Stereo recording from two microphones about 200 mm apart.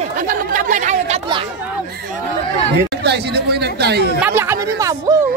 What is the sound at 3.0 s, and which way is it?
Speech, 55° right (ahead or behind).